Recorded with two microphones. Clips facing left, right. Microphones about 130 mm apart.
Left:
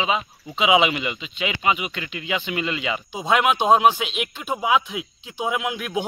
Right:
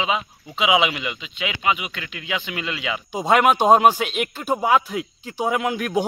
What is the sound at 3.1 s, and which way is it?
Speech, 50° right (ahead or behind).